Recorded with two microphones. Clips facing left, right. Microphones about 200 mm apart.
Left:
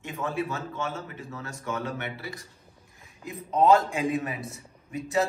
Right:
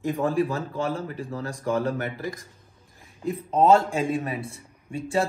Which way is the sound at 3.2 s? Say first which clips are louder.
Right 2 dB; 30° right (ahead or behind).